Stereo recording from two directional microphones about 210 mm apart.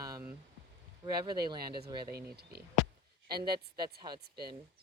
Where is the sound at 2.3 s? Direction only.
50° right (ahead or behind).